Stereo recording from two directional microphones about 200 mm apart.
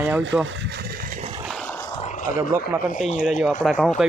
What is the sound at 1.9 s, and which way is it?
Roaring cats, 35° left (ahead or behind).